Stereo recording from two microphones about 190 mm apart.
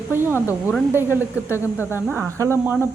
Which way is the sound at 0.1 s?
10° right (ahead or behind).